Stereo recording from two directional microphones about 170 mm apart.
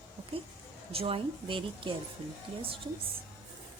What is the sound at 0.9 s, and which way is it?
Speech, 35° right (ahead or behind).